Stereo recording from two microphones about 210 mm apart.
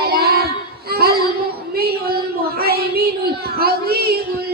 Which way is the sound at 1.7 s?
45° right (ahead or behind).